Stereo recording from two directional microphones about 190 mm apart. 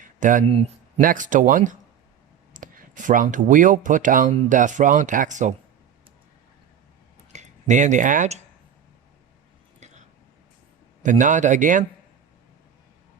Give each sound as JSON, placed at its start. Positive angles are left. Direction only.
{"t": 0.0, "sound": "speech", "side_deg": -45}
{"t": 1.0, "sound": "speech", "side_deg": -45}
{"t": 7.3, "sound": "speech", "side_deg": -40}
{"t": 11.0, "sound": "a man's voice", "side_deg": -40}